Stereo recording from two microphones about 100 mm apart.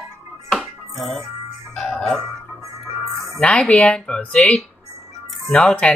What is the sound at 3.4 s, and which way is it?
Speech, 10° left (ahead or behind).